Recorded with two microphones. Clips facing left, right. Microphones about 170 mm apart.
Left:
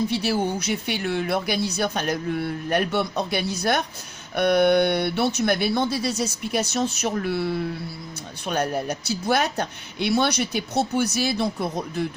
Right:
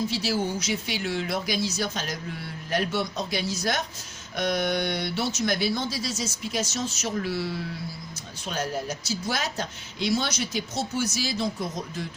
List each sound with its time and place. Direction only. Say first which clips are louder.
0.1 s speech: left 4 dB; 60° left (ahead or behind)